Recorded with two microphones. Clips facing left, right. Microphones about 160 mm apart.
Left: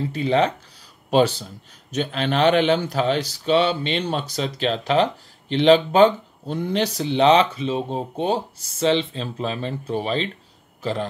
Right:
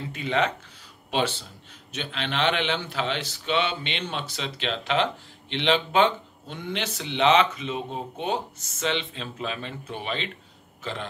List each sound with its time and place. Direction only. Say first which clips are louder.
0.1 s a man's voice: left 5 dB; 35° left (ahead or behind)